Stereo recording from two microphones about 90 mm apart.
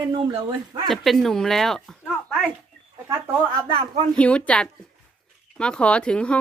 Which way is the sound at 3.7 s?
90° right.